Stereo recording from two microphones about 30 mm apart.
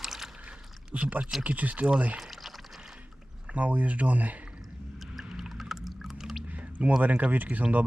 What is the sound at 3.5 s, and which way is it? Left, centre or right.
Speech, right.